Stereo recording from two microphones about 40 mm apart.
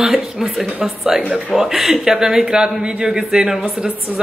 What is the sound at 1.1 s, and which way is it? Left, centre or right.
A man's voice, centre.